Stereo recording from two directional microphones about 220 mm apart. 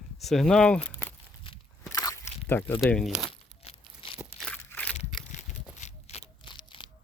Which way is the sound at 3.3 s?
25° left (ahead or behind).